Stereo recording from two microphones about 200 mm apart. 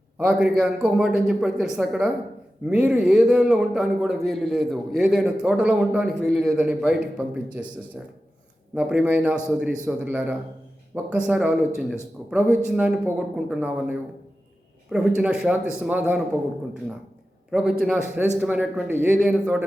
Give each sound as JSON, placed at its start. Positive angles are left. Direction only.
{"t": 0.2, "sound": "a man's voice", "side_deg": -5}
{"t": 17.5, "sound": "a man's voice", "side_deg": -5}